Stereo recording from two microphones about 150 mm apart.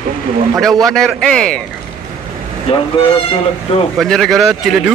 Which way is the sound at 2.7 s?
40° left (ahead or behind).